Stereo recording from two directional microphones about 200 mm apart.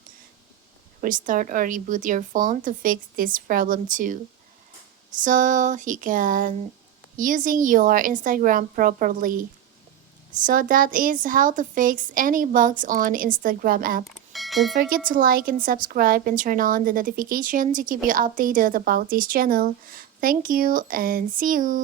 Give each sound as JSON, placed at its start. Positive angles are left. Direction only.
{"t": 1.0, "sound": "a woman's voice", "side_deg": -40}
{"t": 10.4, "sound": "a woman's voice", "side_deg": -45}
{"t": 14.0, "sound": "bell", "side_deg": 0}
{"t": 14.8, "sound": "a woman's voice", "side_deg": -45}